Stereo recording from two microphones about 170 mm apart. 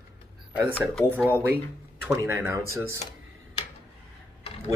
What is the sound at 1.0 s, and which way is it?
Speech, 10° right (ahead or behind).